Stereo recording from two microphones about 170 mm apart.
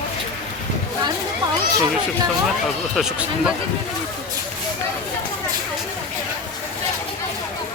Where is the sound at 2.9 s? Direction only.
5° right (ahead or behind).